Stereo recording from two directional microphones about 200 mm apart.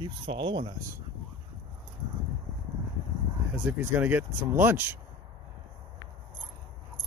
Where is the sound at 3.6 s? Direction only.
10° right (ahead or behind).